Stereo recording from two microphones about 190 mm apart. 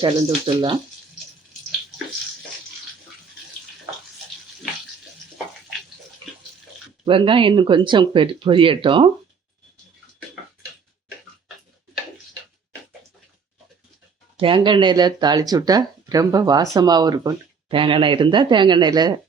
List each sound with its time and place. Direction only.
0.0 s speech: 25° right (ahead or behind)
7.0 s speech: 25° right (ahead or behind)
14.3 s speech: 25° right (ahead or behind)